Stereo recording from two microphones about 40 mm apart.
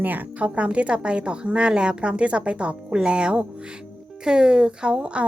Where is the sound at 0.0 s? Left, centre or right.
Right.